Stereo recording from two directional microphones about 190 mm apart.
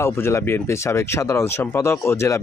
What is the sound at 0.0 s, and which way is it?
Speech, 15° left (ahead or behind).